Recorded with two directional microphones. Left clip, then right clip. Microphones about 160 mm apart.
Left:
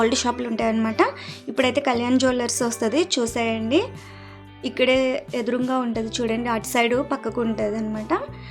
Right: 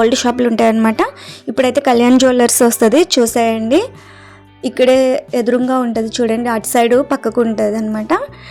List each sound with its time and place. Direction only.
0.0 s a woman's voice: 35° right (ahead or behind)